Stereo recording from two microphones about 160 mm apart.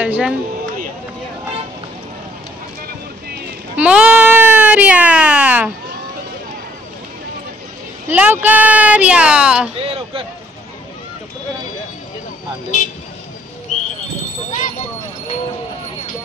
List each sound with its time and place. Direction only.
0.0 s speech: 10° right (ahead or behind)
3.7 s a sound: 5° right (ahead or behind)
8.1 s speech: 10° right (ahead or behind)
9.8 s speech: 35° right (ahead or behind)
12.7 s vehicle: 50° left (ahead or behind)